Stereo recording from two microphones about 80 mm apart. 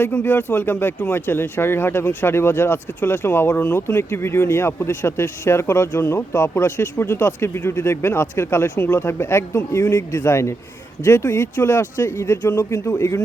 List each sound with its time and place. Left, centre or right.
0.0 s speech: left
8.7 s speech: left
12.7 s speech: left